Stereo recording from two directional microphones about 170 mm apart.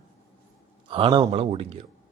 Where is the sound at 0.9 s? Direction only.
30° right (ahead or behind).